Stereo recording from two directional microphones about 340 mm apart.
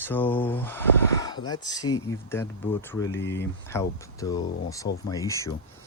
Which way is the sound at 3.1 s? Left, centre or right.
Left.